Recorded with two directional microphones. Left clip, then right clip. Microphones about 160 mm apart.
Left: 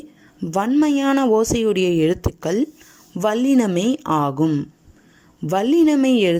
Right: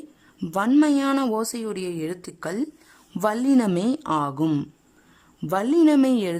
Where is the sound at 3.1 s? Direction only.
5° left (ahead or behind).